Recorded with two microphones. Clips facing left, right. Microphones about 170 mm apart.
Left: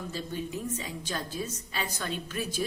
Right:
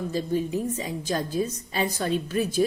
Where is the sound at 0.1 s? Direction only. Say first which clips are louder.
Right 10 dB; 35° right (ahead or behind).